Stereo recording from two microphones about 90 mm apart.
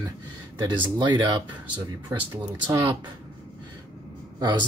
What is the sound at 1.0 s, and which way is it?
Speech, 55° right (ahead or behind).